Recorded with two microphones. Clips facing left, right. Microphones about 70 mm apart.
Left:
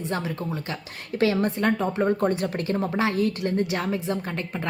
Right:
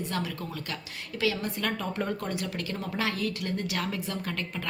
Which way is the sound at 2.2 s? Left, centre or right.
Left.